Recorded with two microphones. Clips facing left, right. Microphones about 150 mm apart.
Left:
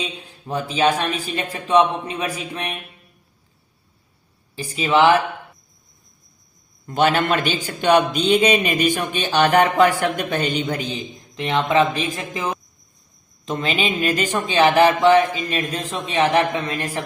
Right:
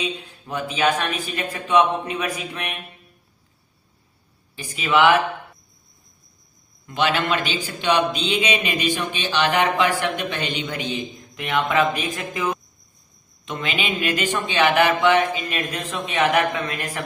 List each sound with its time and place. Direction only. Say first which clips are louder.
0.0 s speech: right 2 dB; 35° left (ahead or behind)
4.5 s speech: left 2 dB; 35° left (ahead or behind)
6.8 s a man's voice: left 4 dB; 45° left (ahead or behind); by 17.0 s 30° left (ahead or behind)